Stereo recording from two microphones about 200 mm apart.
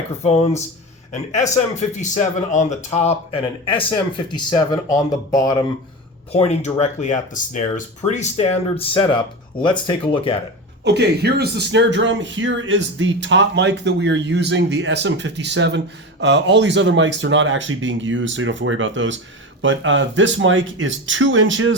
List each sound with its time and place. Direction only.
0.2 s speech: 30° left (ahead or behind)
6.3 s speech: 30° left (ahead or behind)
10.8 s speech: 55° right (ahead or behind)